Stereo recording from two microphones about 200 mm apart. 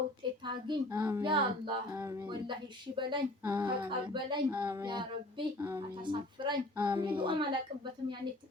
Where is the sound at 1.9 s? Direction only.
10° right (ahead or behind).